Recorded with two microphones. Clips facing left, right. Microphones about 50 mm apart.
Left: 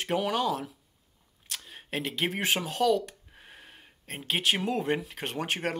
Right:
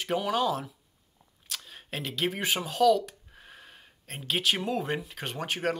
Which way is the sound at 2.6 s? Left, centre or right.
Left.